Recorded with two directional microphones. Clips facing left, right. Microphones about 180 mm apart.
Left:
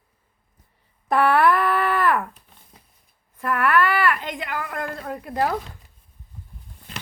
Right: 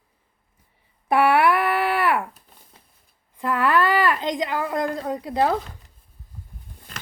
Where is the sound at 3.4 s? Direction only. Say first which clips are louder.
Even; 15° right (ahead or behind).